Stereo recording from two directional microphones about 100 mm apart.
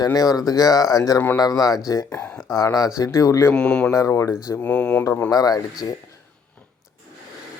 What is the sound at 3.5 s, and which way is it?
Speech, 10° left (ahead or behind).